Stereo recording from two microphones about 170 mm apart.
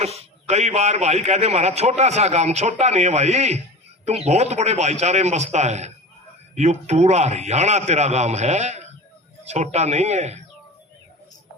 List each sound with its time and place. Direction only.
0.0 s a man's voice: 40° right (ahead or behind)